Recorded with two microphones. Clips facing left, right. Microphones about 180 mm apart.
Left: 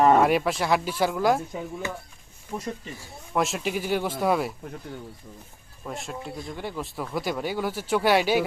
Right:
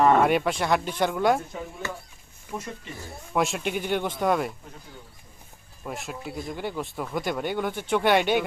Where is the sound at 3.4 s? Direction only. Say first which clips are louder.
Even; centre (ahead or behind).